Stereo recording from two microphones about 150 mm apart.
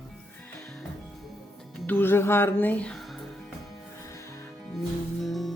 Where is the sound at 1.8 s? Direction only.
15° left (ahead or behind).